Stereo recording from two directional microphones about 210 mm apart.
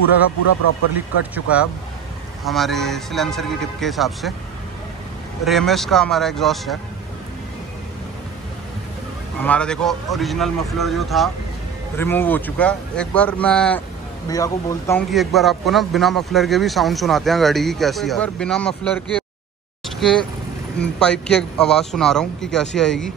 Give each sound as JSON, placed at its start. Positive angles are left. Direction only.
{"t": 0.9, "sound": "a man's voice", "side_deg": -5}
{"t": 5.4, "sound": "a man's voice", "side_deg": 0}
{"t": 9.4, "sound": "a man's voice", "side_deg": 5}
{"t": 14.3, "sound": "speech", "side_deg": 15}
{"t": 15.0, "sound": "a man's voice", "side_deg": 0}